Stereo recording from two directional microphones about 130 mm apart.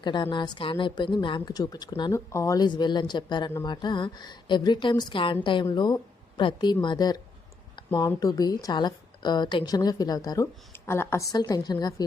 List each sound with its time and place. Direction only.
0.0 s a woman's voice: 35° left (ahead or behind)
2.6 s a woman's voice: 35° left (ahead or behind)